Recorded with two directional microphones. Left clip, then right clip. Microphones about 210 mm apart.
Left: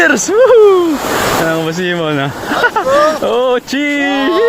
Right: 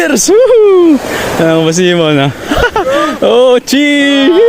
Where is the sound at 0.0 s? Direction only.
50° right (ahead or behind).